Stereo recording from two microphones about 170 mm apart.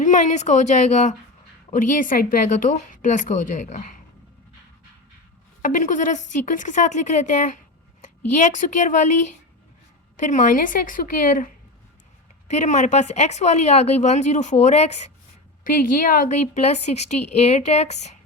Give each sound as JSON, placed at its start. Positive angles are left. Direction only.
{"t": 0.0, "sound": "speech", "side_deg": 45}
{"t": 5.6, "sound": "speech", "side_deg": 50}
{"t": 10.2, "sound": "speech", "side_deg": 45}
{"t": 12.5, "sound": "speech", "side_deg": 45}
{"t": 15.8, "sound": "a woman's voice", "side_deg": 55}